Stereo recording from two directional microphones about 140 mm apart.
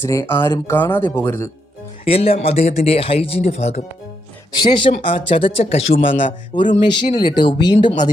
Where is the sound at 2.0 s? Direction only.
45° left (ahead or behind).